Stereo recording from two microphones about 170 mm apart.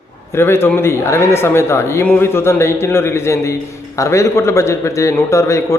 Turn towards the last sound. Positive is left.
turn(degrees=15)  # may be behind; listen again after turning